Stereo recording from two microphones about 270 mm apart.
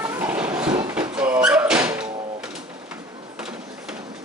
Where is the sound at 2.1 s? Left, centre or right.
Centre.